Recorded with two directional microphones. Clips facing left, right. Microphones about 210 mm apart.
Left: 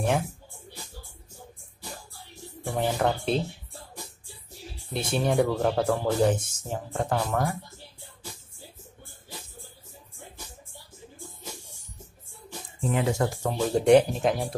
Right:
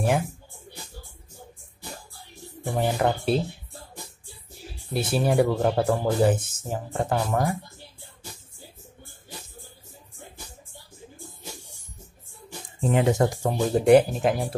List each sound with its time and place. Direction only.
2.6 s speech: 5° right (ahead or behind)
4.9 s speech: 5° right (ahead or behind)
12.9 s speech: 20° right (ahead or behind)
13.7 s speech: 5° right (ahead or behind)